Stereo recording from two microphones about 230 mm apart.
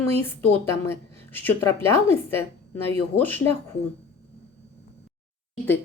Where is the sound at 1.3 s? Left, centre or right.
Centre.